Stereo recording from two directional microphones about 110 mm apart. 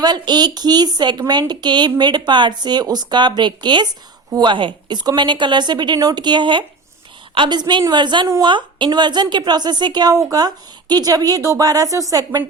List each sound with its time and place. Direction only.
0.0 s a woman's voice: 40° right (ahead or behind)